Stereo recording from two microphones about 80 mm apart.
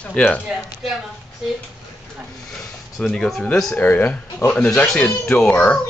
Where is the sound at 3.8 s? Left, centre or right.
Left.